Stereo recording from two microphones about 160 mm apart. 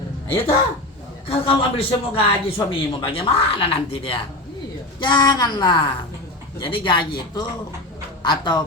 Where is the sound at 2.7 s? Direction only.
35° left (ahead or behind).